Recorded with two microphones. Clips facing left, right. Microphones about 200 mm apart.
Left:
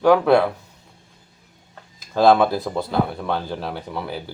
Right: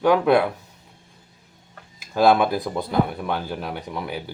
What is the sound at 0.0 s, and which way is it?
Speech, 15° right (ahead or behind).